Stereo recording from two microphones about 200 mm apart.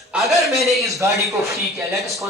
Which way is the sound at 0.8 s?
15° right (ahead or behind).